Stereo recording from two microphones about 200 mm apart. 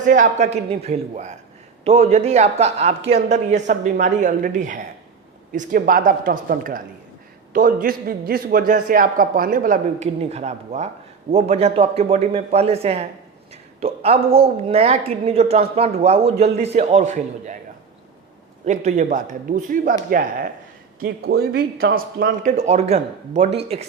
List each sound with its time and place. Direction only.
0.0 s a woman's voice: 40° right (ahead or behind)
10.2 s a woman's voice: 35° right (ahead or behind)
18.6 s a woman's voice: 35° right (ahead or behind)
22.5 s a woman's voice: 35° right (ahead or behind)